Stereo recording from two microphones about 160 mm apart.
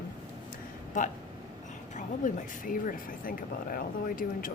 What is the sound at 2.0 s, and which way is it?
Speech, 55° left (ahead or behind).